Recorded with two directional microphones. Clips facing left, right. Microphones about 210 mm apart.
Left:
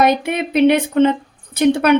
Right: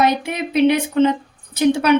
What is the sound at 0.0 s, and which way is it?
A woman's voice, 55° left (ahead or behind).